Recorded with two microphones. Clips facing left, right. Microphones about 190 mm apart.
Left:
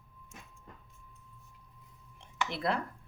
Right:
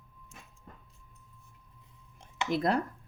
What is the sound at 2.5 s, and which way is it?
Speech, 40° right (ahead or behind).